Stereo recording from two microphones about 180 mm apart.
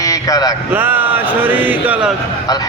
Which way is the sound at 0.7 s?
10° right (ahead or behind).